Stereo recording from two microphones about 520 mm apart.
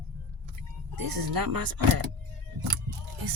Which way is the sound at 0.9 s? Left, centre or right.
Right.